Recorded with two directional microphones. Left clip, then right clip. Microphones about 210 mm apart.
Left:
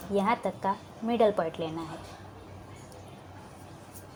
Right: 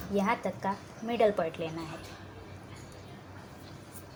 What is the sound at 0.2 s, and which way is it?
A woman's voice, 25° left (ahead or behind).